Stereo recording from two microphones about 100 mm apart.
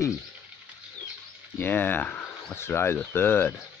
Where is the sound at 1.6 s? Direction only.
20° left (ahead or behind).